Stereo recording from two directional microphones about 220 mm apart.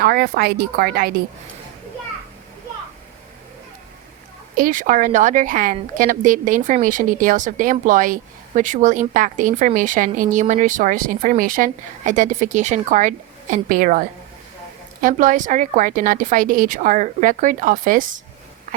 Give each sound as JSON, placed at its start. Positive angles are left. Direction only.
{"t": 0.0, "sound": "a woman's voice", "side_deg": -45}
{"t": 4.5, "sound": "a woman's voice", "side_deg": -40}
{"t": 15.0, "sound": "a woman's voice", "side_deg": -35}